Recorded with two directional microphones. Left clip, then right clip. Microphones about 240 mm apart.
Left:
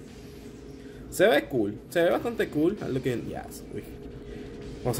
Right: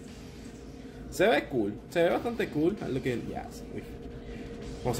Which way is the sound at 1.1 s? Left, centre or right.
Centre.